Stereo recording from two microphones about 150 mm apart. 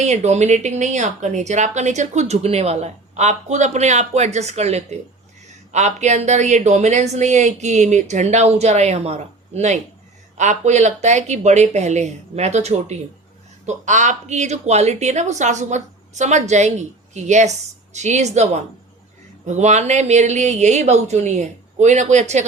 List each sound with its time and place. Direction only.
0.0 s speech: 50° right (ahead or behind)